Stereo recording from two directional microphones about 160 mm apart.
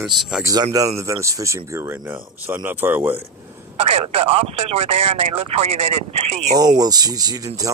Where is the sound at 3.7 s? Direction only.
40° right (ahead or behind).